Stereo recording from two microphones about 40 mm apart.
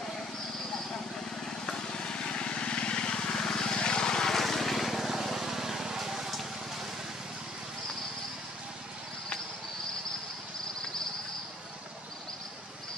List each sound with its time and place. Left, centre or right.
1.7 s vehicle: centre